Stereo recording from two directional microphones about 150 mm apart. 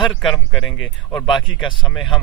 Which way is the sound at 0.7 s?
30° left (ahead or behind).